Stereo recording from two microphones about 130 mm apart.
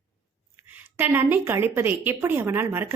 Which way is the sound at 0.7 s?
15° right (ahead or behind).